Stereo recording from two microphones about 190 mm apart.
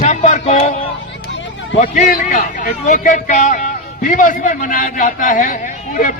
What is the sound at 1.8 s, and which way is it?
A man's voice, 45° left (ahead or behind).